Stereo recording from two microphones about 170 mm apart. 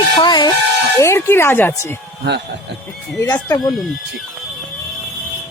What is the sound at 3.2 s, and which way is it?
Speech, 15° left (ahead or behind).